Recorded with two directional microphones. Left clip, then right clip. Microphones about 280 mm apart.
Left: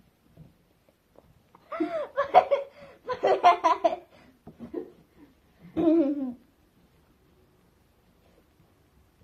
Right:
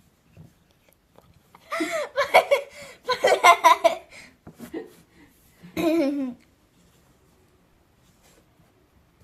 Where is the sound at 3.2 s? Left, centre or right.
Right.